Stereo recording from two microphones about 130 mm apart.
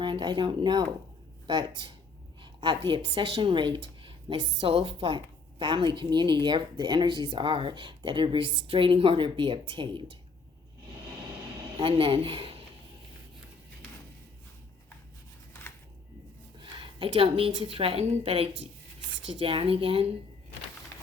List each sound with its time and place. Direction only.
0.0 s a woman's voice: 35° right (ahead or behind)
11.8 s speech: 45° right (ahead or behind)
16.6 s a woman's voice: 40° right (ahead or behind)